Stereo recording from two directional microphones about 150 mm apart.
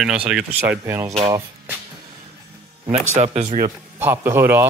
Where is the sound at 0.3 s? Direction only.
5° right (ahead or behind).